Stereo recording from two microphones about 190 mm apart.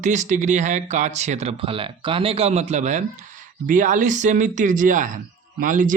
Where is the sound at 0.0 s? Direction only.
40° right (ahead or behind).